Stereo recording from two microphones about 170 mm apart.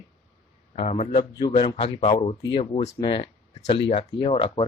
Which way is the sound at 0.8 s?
40° left (ahead or behind).